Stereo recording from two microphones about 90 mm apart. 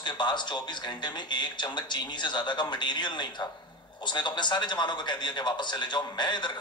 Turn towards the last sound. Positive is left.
turn(degrees=60)  # may be behind; listen again after turning